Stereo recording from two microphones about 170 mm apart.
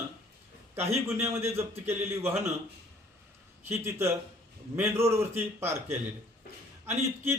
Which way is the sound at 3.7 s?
15° right (ahead or behind).